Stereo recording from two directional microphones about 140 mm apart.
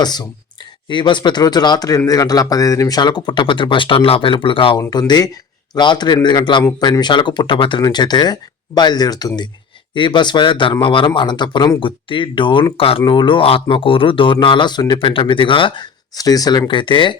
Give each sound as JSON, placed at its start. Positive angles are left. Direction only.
{"t": 0.0, "sound": "speech", "side_deg": 30}